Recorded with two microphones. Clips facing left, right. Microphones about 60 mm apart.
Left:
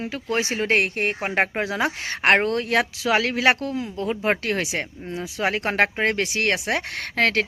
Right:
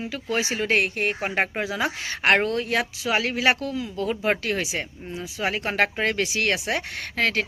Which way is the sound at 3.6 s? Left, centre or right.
Left.